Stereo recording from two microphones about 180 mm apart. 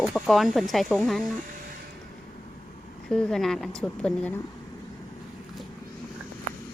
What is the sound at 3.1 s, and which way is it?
Speech, 5° left (ahead or behind).